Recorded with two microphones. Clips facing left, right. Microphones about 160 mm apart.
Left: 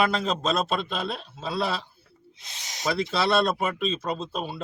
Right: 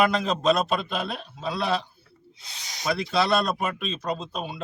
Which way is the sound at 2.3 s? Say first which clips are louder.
Even; 20° left (ahead or behind).